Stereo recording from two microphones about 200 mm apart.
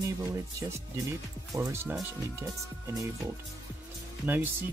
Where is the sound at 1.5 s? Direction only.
15° right (ahead or behind).